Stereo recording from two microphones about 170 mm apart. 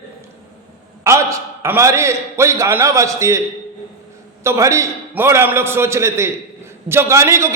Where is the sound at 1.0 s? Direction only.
15° right (ahead or behind).